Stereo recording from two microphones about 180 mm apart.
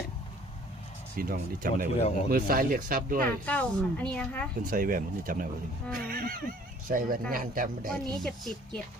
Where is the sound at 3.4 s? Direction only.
5° left (ahead or behind).